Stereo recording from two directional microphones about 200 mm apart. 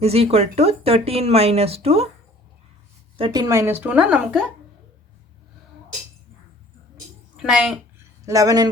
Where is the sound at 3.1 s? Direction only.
20° right (ahead or behind); by 4.4 s 5° right (ahead or behind).